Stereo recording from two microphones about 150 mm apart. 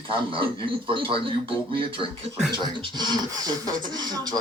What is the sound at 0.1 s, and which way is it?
A man's voice, 35° right (ahead or behind).